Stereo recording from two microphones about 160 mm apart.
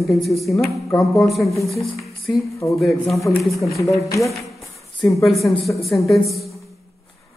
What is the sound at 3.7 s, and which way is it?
Speech, 20° left (ahead or behind).